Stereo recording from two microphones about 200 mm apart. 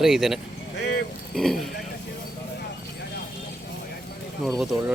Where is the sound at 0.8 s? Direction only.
60° left (ahead or behind).